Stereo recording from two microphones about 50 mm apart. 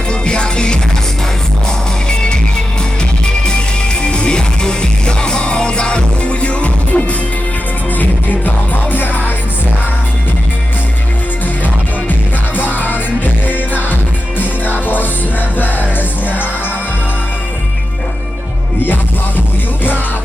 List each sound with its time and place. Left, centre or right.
0.1 s music: centre
2.0 s music: centre
7.9 s music: left
12.5 s music: left